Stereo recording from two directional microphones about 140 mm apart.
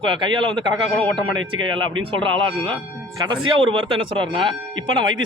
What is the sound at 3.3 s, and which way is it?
Speech, 40° right (ahead or behind).